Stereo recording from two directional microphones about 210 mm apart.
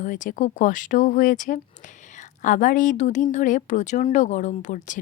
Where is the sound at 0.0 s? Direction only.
40° left (ahead or behind).